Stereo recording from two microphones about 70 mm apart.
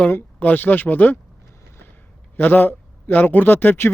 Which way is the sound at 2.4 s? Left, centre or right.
Left.